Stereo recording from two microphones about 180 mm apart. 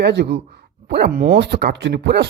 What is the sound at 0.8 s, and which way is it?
Speech, 55° right (ahead or behind).